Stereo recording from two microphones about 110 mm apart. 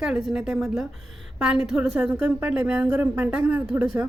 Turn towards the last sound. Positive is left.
turn(degrees=-20)  # may be behind; listen again after turning